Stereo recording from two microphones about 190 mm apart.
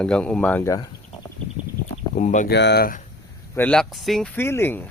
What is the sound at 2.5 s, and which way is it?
Speech, 60° left (ahead or behind).